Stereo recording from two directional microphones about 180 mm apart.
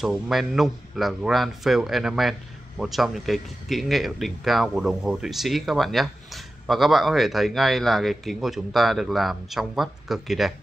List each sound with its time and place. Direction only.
0.0 s speech: centre (ahead or behind)